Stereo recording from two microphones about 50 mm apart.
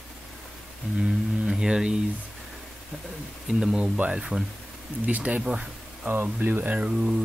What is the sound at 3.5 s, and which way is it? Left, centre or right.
Speech, centre.